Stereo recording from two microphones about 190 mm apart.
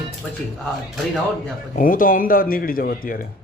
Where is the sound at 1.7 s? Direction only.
45° left (ahead or behind).